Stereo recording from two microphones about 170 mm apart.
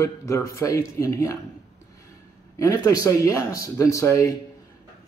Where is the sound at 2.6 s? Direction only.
20° left (ahead or behind).